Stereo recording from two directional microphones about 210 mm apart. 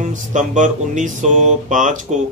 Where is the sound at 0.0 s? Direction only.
35° right (ahead or behind).